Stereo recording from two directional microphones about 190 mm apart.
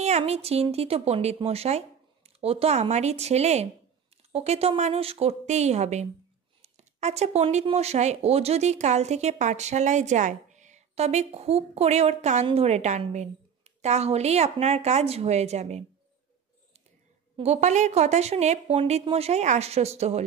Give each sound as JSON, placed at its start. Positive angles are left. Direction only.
{"t": 0.0, "sound": "speech", "side_deg": -35}
{"t": 17.4, "sound": "speech", "side_deg": -35}